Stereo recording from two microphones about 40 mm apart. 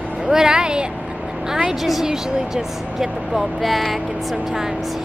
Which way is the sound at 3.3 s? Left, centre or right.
Centre.